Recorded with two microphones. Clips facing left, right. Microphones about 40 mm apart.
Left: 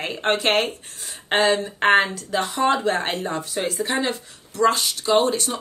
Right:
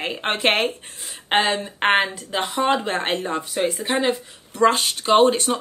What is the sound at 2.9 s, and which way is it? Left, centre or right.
Speech, right.